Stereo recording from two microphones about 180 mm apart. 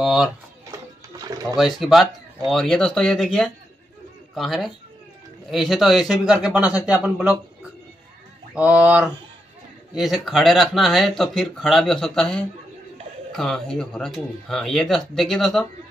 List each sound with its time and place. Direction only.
0.0 s speech: centre (ahead or behind)
0.7 s music: 20° right (ahead or behind)
1.8 s speech: centre (ahead or behind)
8.5 s speech: 5° right (ahead or behind)